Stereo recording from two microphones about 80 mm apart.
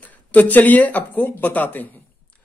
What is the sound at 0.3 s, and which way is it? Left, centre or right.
Speech, left.